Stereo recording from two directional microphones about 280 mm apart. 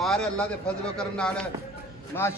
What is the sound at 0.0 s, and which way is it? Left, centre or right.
A man's voice, centre.